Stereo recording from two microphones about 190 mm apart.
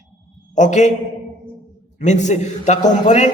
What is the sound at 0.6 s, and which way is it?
Speech, 40° left (ahead or behind).